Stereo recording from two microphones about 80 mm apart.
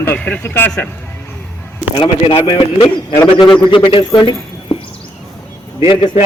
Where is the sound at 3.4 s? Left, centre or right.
Left.